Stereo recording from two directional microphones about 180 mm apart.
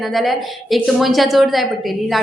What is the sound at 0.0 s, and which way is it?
A woman's voice, centre (ahead or behind).